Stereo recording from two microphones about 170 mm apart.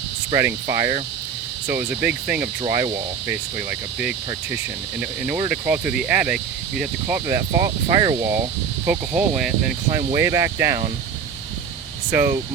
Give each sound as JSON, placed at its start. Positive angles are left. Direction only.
{"t": 0.3, "sound": "speech", "side_deg": -15}
{"t": 2.6, "sound": "speech", "side_deg": -20}
{"t": 7.3, "sound": "speech", "side_deg": -15}
{"t": 8.9, "sound": "speech", "side_deg": -5}
{"t": 10.1, "sound": "speech", "side_deg": -15}
{"t": 12.1, "sound": "speech", "side_deg": -15}